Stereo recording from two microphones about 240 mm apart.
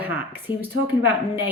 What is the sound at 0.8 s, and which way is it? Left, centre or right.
Speech, left.